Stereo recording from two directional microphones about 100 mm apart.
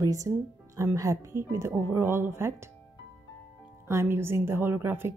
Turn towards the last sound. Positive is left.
turn(degrees=-25)  # may be behind; listen again after turning